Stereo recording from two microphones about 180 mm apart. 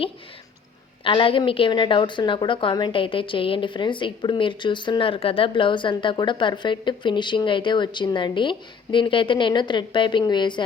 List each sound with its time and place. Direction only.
1.0 s a woman's voice: 30° left (ahead or behind)